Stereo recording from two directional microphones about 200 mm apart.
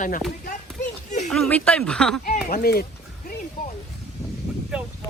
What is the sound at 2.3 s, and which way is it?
Speech, 50° left (ahead or behind).